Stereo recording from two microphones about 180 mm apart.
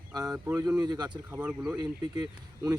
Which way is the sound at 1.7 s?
20° right (ahead or behind).